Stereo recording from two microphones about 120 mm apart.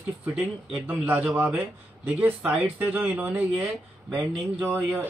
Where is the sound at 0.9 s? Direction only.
15° right (ahead or behind).